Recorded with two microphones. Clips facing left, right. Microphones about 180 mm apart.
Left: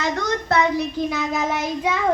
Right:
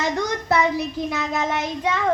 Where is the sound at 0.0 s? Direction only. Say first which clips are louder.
Even; 15° right (ahead or behind).